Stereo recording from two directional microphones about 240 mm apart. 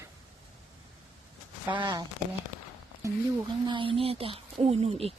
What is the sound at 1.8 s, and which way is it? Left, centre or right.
Speech, centre.